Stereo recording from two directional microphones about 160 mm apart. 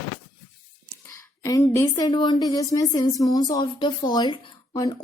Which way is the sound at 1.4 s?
20° left (ahead or behind).